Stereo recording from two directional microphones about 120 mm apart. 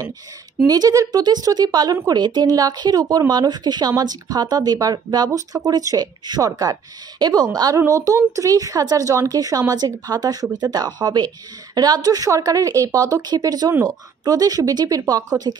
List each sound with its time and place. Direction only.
0.7 s a woman's voice: 30° right (ahead or behind)